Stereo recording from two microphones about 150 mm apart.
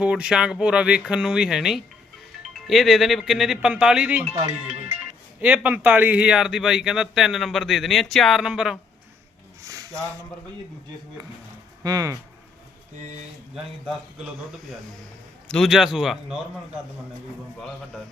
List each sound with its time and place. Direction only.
0.0 s speech: 5° right (ahead or behind)
4.4 s speech: 50° right (ahead or behind)
5.4 s speech: 10° right (ahead or behind)
9.6 s a sound: 20° right (ahead or behind)
11.8 s speech: 25° right (ahead or behind)
15.4 s speech: 5° left (ahead or behind)